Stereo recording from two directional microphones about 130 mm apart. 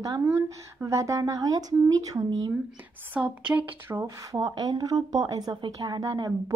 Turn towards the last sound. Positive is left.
turn(degrees=-30)  # may be behind; listen again after turning